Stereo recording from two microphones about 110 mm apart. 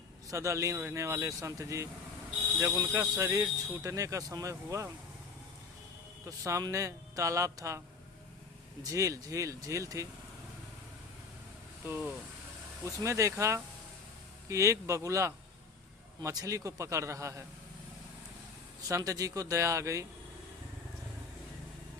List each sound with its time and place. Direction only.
0.3 s speech: 30° right (ahead or behind)
6.2 s speech: 30° right (ahead or behind)
8.8 s speech: 30° right (ahead or behind)
11.9 s speech: 20° right (ahead or behind)
18.8 s speech: 30° right (ahead or behind)